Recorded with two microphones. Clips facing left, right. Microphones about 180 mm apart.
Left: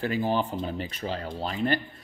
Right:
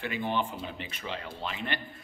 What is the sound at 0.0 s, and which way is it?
Speech, 35° left (ahead or behind).